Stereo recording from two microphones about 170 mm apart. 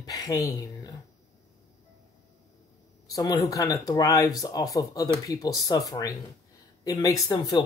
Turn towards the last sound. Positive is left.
turn(degrees=25)  # may be behind; listen again after turning